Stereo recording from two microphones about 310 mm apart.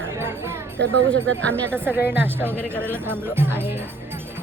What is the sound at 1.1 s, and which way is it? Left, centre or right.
Speech, centre.